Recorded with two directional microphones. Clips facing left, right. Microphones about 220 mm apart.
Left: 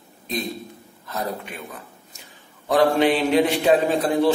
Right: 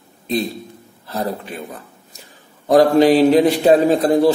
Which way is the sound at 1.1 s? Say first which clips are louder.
Right 5 dB; 30° right (ahead or behind).